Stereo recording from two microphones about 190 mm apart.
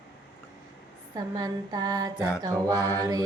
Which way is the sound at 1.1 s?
20° right (ahead or behind).